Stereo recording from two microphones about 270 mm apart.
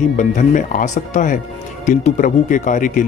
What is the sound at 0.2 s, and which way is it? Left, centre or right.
Speech, left.